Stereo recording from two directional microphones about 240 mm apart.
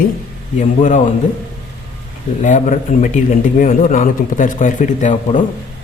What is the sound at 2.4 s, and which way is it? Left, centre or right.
Speech, left.